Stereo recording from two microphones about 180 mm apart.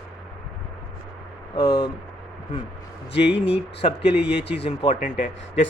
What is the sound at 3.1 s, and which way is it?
Speech, 70° left (ahead or behind).